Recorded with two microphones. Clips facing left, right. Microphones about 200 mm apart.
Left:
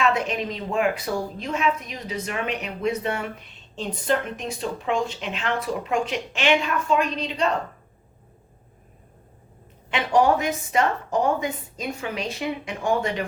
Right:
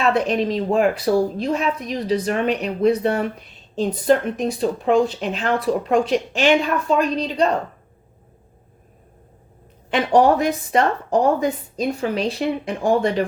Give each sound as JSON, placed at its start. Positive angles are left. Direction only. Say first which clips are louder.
{"t": 0.0, "sound": "a woman's voice", "louder": "right 5 dB", "side_deg": -35}
{"t": 9.9, "sound": "a woman's voice", "louder": "right 4 dB", "side_deg": -35}